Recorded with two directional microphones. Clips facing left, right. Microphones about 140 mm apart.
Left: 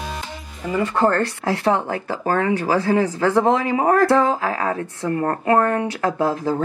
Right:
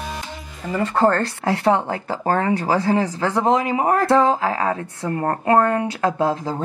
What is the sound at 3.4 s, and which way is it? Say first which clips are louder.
A woman's voice: left 1 dB; 20° right (ahead or behind).